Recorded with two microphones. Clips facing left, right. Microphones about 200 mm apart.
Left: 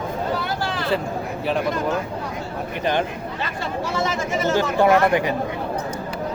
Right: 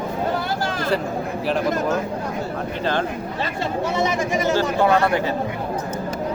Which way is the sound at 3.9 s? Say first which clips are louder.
Right 1 dB; 15° right (ahead or behind).